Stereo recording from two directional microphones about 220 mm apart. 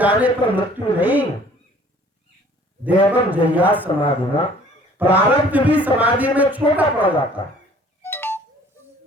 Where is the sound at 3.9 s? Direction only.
20° left (ahead or behind).